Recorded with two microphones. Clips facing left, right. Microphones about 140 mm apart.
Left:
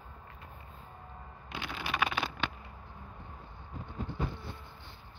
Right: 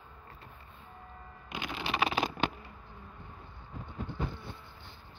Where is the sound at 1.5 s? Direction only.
15° right (ahead or behind).